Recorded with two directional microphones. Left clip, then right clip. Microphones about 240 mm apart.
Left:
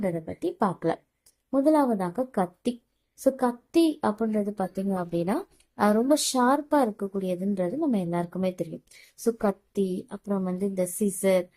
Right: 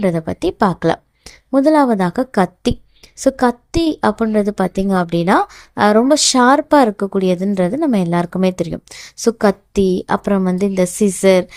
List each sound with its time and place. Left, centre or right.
0.0 s a woman's voice: right